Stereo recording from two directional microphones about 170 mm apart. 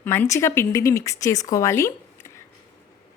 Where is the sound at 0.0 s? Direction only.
15° left (ahead or behind).